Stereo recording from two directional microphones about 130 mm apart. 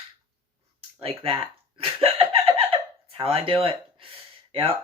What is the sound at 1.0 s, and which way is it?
Speech, 50° right (ahead or behind).